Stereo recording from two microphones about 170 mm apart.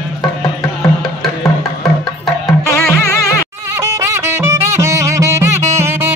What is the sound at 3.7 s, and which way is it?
Music, 15° right (ahead or behind).